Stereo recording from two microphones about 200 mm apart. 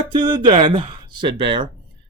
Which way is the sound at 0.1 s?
25° right (ahead or behind).